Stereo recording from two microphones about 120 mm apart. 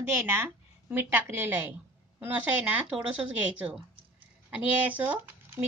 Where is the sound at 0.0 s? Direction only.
20° right (ahead or behind).